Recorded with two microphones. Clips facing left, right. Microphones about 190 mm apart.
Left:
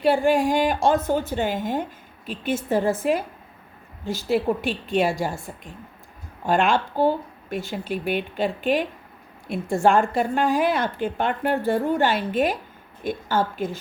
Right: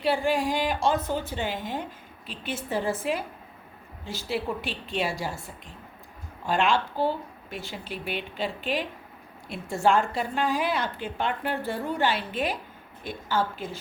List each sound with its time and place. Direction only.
0.0 s a woman's voice: 50° left (ahead or behind)
6.4 s a woman's voice: 50° left (ahead or behind)